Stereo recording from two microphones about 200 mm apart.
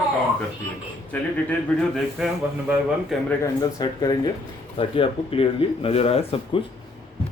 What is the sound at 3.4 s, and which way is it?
Speech, 20° left (ahead or behind).